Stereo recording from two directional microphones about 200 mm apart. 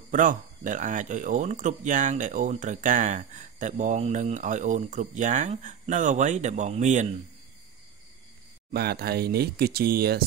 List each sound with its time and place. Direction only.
0.1 s speech: 40° right (ahead or behind)
8.7 s speech: 50° right (ahead or behind)